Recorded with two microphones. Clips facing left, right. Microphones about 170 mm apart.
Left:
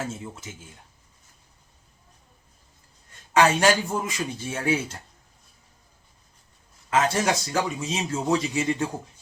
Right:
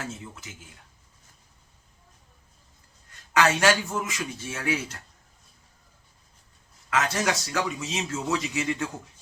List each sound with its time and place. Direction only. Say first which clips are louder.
3.3 s speech: left 2 dB; 30° left (ahead or behind)
6.9 s speech: left 3 dB; 30° left (ahead or behind)